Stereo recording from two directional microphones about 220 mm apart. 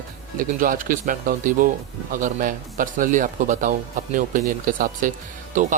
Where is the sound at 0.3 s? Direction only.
40° right (ahead or behind).